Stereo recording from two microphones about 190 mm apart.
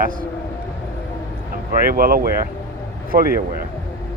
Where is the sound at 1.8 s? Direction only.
50° right (ahead or behind).